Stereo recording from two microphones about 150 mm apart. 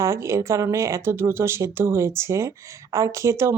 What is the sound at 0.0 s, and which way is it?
Speech, 20° right (ahead or behind).